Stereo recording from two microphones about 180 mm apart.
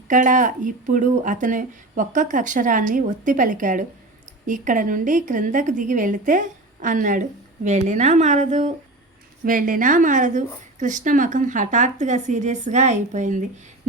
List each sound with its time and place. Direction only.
0.1 s a woman's voice: 45° right (ahead or behind)